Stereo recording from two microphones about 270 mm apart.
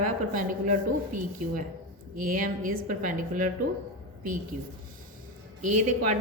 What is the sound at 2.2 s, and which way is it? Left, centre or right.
A woman's voice, right.